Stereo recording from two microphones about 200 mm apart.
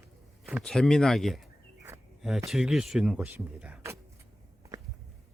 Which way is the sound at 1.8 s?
10° right (ahead or behind).